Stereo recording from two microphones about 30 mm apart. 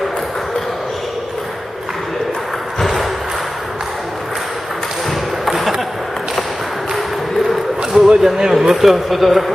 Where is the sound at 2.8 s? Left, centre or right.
Centre.